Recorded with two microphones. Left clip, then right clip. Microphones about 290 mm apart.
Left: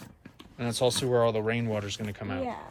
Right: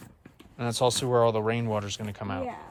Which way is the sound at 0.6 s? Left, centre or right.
Centre.